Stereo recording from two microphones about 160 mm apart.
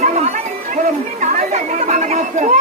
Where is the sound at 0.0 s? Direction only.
45° right (ahead or behind).